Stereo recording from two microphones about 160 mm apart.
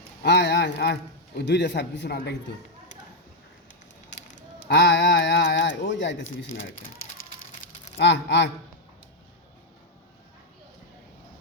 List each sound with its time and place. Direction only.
0.2 s a sound: 90° left
1.4 s a man's voice: 90° left
4.4 s speech: 90° left
7.9 s a man's voice: 90° left